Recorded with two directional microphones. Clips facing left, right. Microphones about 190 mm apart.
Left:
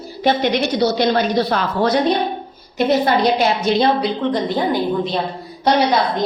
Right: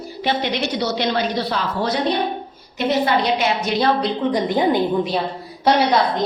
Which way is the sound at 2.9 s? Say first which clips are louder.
Left 2 dB; 40° left (ahead or behind).